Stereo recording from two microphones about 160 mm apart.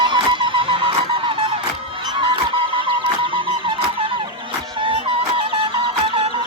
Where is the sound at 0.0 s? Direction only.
30° right (ahead or behind).